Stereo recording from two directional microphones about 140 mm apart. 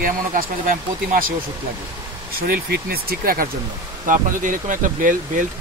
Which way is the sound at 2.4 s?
90° right.